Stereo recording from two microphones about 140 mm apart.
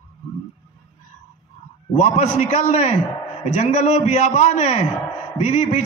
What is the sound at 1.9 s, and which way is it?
A man's voice, 55° left (ahead or behind).